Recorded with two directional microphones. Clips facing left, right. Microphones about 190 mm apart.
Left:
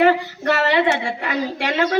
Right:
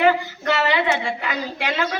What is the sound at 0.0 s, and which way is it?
A woman's voice, 50° left (ahead or behind).